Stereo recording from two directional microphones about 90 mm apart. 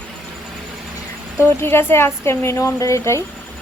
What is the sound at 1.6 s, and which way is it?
A woman's voice, 25° left (ahead or behind).